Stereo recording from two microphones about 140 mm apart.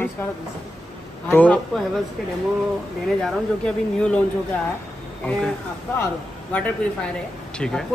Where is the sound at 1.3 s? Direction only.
10° left (ahead or behind).